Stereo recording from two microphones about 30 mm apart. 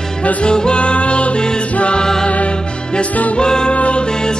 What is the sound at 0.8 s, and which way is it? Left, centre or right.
Music, left.